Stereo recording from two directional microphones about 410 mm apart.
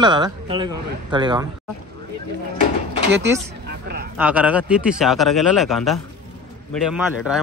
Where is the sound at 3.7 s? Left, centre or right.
Right.